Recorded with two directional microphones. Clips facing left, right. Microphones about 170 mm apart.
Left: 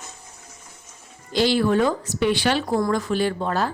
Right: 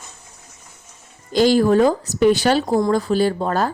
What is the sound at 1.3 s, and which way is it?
A woman's voice, 45° right (ahead or behind).